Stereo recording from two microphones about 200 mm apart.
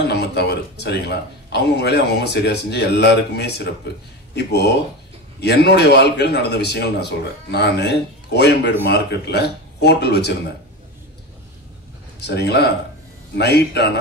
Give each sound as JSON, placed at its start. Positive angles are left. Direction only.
{"t": 0.0, "sound": "speech", "side_deg": 55}
{"t": 12.2, "sound": "speech", "side_deg": 55}